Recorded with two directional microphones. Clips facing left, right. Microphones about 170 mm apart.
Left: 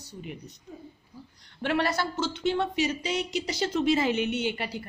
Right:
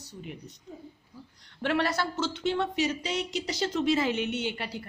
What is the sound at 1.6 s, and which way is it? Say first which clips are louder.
Speech: left 1 dB; 5° left (ahead or behind).